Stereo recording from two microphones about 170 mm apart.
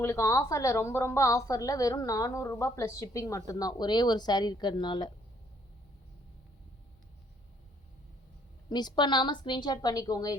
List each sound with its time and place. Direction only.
0.0 s a woman's voice: 15° left (ahead or behind)
8.7 s a woman's voice: 25° left (ahead or behind)